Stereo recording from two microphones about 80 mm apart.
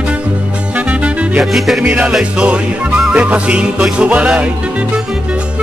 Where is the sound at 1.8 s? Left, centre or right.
Centre.